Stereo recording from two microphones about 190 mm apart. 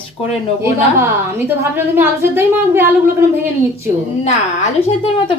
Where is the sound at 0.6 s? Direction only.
10° right (ahead or behind).